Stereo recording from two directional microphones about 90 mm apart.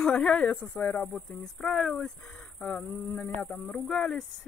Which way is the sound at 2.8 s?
30° left (ahead or behind).